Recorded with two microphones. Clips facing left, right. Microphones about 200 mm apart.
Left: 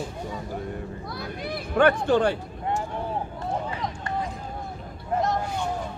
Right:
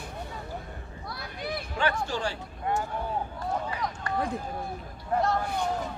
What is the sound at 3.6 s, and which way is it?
Run, 25° left (ahead or behind).